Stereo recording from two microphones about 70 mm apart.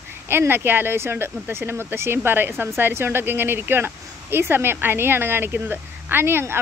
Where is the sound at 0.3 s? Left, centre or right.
Right.